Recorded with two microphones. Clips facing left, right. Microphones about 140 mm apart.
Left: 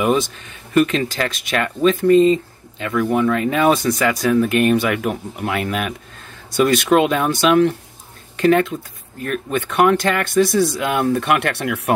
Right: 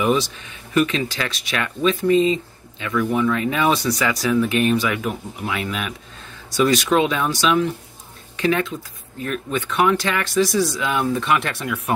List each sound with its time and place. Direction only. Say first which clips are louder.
0.1 s speech: left 2 dB; 45° left (ahead or behind); by 11.9 s 70° left (ahead or behind)